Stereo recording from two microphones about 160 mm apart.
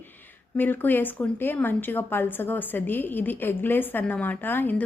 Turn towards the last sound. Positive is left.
turn(degrees=10)  # may be behind; listen again after turning